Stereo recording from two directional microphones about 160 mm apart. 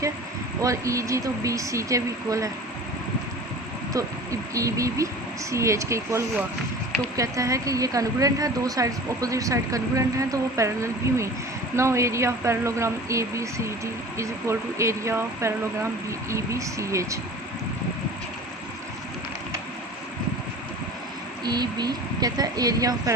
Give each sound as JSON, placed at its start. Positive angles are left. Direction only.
{"t": 0.6, "sound": "a woman's voice", "side_deg": -20}
{"t": 3.9, "sound": "a woman's voice", "side_deg": -20}
{"t": 21.4, "sound": "a woman's voice", "side_deg": -25}